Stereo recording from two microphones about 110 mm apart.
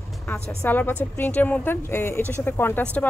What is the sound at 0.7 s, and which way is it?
Speech, 15° left (ahead or behind).